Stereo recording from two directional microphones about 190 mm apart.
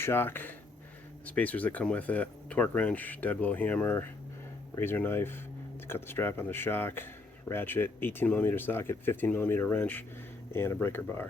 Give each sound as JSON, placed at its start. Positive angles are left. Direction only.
{"t": 0.0, "sound": "speech", "side_deg": 10}